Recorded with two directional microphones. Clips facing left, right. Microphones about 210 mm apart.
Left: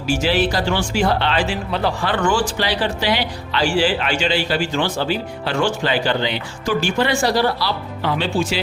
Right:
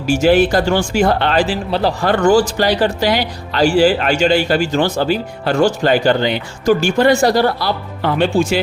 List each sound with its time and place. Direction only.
0.0 s speech: 50° right (ahead or behind)